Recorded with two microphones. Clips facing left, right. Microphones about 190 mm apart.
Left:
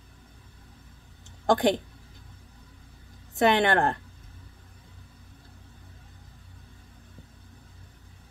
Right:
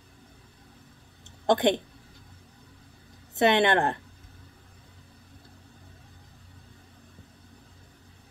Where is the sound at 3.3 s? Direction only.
25° right (ahead or behind).